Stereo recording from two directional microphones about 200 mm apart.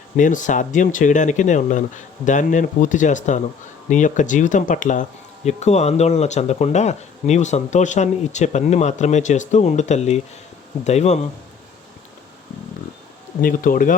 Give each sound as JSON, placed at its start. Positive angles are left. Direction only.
{"t": 0.2, "sound": "speech", "side_deg": 40}
{"t": 13.4, "sound": "speech", "side_deg": 45}